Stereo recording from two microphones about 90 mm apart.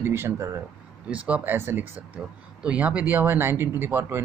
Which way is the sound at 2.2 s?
10° right (ahead or behind).